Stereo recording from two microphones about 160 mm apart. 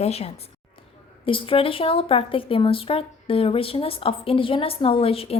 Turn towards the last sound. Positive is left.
turn(degrees=35)  # may be behind; listen again after turning